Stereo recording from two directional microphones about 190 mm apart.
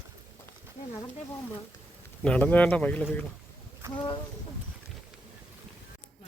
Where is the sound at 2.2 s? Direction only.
5° left (ahead or behind).